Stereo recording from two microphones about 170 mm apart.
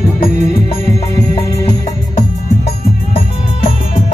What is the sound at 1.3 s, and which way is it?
Music, 30° left (ahead or behind).